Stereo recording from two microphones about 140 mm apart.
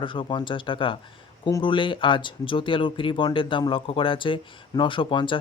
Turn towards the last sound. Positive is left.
turn(degrees=35)  # may be behind; listen again after turning